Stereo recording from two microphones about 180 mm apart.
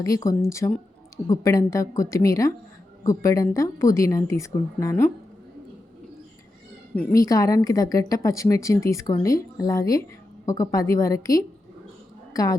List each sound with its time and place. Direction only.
0.0 s a woman's voice: 20° left (ahead or behind)
7.1 s a woman's voice: 20° left (ahead or behind)